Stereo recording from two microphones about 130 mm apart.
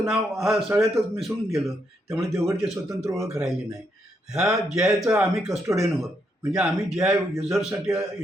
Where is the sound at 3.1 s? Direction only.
25° right (ahead or behind).